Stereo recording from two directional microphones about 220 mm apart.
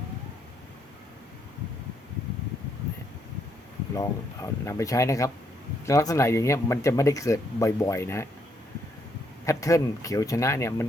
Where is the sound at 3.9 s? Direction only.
15° left (ahead or behind).